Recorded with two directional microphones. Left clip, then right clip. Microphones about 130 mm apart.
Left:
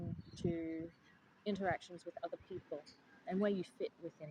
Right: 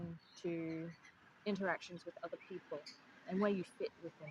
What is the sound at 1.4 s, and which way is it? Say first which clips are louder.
Speech: left 1 dB; 10° left (ahead or behind).